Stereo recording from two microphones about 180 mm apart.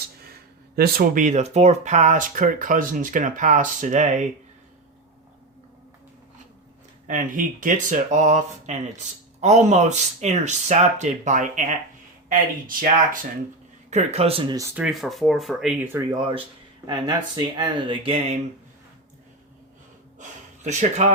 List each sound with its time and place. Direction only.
0.8 s speech: 55° right (ahead or behind)
7.1 s speech: 45° right (ahead or behind)
13.9 s speech: 35° right (ahead or behind)
14.5 s speech: 15° right (ahead or behind)
14.8 s speech: centre (ahead or behind)
16.1 s speech: 25° right (ahead or behind)
20.7 s speech: 40° right (ahead or behind)